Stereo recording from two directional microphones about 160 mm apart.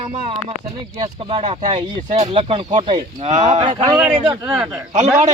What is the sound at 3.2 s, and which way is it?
Speech, 45° right (ahead or behind).